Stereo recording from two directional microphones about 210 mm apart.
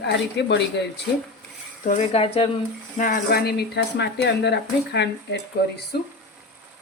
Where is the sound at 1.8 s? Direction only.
40° left (ahead or behind).